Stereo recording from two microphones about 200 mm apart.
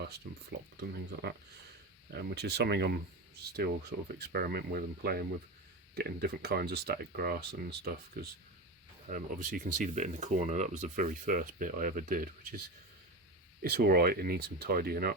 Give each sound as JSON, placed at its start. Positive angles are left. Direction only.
{"t": 2.1, "sound": "speech", "side_deg": -55}
{"t": 9.0, "sound": "speech", "side_deg": -40}
{"t": 13.6, "sound": "speech", "side_deg": -50}